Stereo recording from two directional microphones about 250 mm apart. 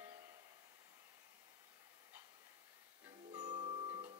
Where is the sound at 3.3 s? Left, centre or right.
Centre.